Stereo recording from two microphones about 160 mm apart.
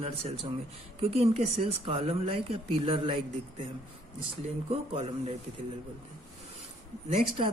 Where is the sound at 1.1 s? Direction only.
40° right (ahead or behind).